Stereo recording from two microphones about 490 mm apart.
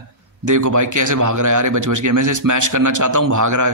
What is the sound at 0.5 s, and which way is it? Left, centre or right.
A man's voice, right.